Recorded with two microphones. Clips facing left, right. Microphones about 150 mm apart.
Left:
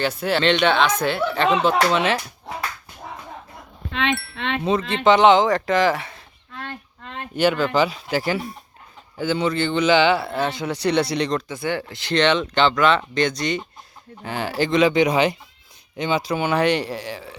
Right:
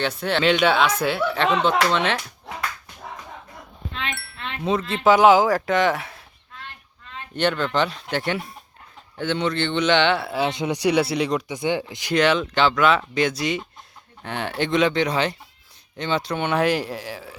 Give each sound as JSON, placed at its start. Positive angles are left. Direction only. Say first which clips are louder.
{"t": 0.0, "sound": "speech", "louder": "left 1 dB", "side_deg": 0}
{"t": 4.1, "sound": "speech", "louder": "left 11 dB", "side_deg": 0}
{"t": 4.4, "sound": "speech", "louder": "left 8 dB", "side_deg": 75}
{"t": 5.0, "sound": "speech", "louder": "even", "side_deg": -5}
{"t": 6.6, "sound": "a sound", "louder": "left 8 dB", "side_deg": 65}
{"t": 7.3, "sound": "speech", "louder": "left 3 dB", "side_deg": 5}
{"t": 10.3, "sound": "speech", "louder": "right 1 dB", "side_deg": -15}
{"t": 14.9, "sound": "speech", "louder": "left 4 dB", "side_deg": 15}